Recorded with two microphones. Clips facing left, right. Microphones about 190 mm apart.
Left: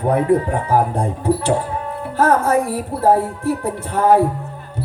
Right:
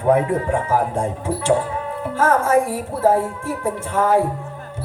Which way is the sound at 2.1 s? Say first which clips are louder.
Left 1 dB; 35° left (ahead or behind).